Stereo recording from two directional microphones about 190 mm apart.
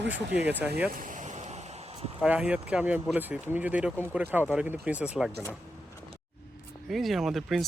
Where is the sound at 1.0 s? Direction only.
40° right (ahead or behind).